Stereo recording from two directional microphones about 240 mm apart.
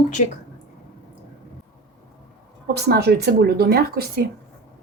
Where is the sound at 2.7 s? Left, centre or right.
Right.